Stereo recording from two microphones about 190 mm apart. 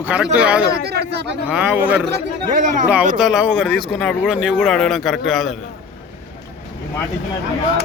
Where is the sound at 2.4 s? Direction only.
40° right (ahead or behind).